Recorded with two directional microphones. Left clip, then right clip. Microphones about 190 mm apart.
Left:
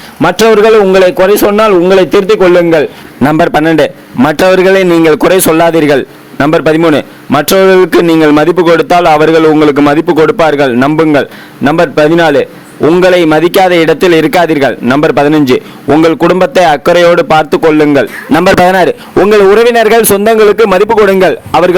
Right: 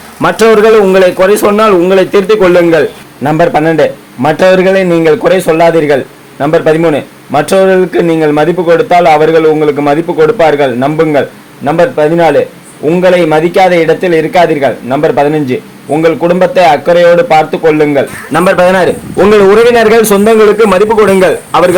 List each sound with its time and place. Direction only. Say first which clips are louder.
0.2 s a man's voice: even; 30° left (ahead or behind)
3.2 s a man's voice: even; 45° left (ahead or behind)